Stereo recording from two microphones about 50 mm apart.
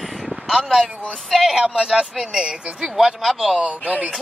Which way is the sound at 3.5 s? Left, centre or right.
Right.